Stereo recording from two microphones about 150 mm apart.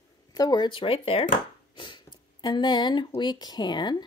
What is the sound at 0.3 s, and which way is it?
Speech, 25° left (ahead or behind).